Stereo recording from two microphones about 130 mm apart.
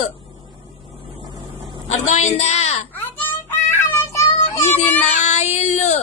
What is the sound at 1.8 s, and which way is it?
A woman's voice, 65° left (ahead or behind).